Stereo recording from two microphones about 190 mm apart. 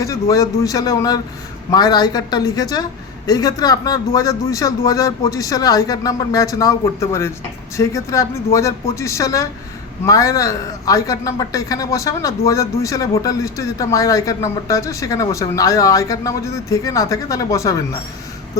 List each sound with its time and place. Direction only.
0.0 s a man's voice: 15° left (ahead or behind)